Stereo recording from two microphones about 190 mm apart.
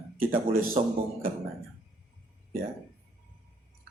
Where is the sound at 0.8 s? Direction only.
35° right (ahead or behind).